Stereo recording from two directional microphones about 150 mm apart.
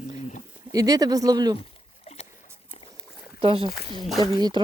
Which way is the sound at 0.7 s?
25° right (ahead or behind).